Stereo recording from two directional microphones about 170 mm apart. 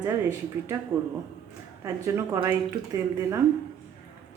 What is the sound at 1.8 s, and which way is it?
A woman's voice, 15° right (ahead or behind).